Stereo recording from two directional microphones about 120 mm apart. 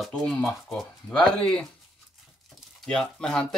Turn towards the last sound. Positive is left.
turn(degrees=5)  # may be behind; listen again after turning